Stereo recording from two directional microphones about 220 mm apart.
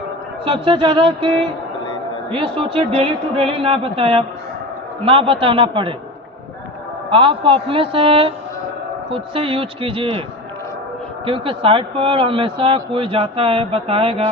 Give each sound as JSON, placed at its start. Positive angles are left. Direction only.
{"t": 0.4, "sound": "a man's voice", "side_deg": -25}
{"t": 2.3, "sound": "a man's voice", "side_deg": -25}
{"t": 7.1, "sound": "a man's voice", "side_deg": -25}
{"t": 11.3, "sound": "a man's voice", "side_deg": -25}